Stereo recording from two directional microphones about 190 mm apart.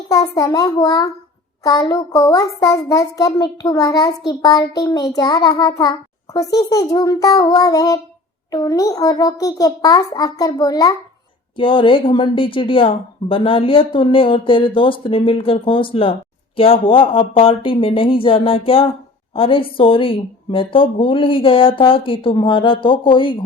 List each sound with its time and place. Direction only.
0.1 s speech: 20° left (ahead or behind)